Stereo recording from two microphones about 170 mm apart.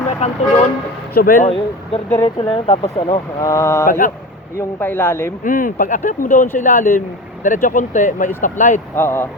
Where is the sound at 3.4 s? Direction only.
15° left (ahead or behind).